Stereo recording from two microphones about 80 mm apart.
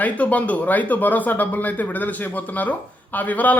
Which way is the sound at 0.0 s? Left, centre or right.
Centre.